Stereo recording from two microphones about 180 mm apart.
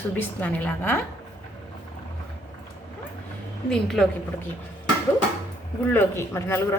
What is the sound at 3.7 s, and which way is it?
Speech, 5° left (ahead or behind).